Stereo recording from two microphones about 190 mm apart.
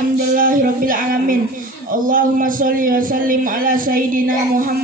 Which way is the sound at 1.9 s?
45° right (ahead or behind).